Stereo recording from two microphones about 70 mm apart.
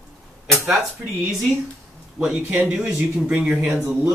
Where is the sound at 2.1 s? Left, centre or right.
Centre.